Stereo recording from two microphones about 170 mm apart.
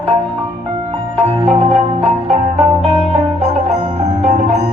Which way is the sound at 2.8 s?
35° right (ahead or behind).